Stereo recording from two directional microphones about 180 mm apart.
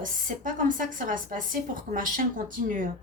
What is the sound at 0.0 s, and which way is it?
Speech, 45° right (ahead or behind).